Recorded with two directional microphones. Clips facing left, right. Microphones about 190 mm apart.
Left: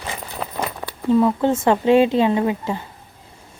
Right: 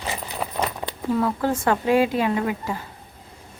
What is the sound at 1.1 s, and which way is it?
A woman's voice, 20° left (ahead or behind).